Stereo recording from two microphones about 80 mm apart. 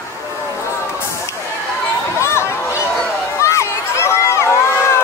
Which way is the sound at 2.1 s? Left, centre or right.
Left.